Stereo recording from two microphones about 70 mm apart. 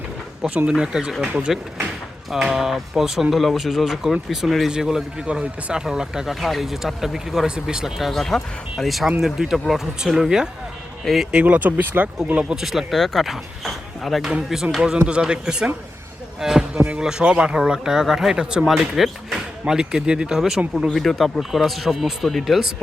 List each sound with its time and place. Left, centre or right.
0.7 s speech: centre
2.3 s speech: centre
11.3 s speech: centre
12.5 s speech: centre
14.3 s speech: centre
16.7 s speech: right; by 22.7 s centre